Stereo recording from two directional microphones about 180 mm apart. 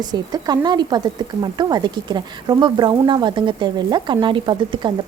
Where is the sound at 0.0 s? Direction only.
25° right (ahead or behind).